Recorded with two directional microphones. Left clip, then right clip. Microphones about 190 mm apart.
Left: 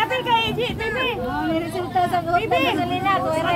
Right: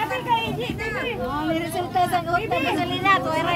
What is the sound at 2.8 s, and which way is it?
Speech, 50° right (ahead or behind).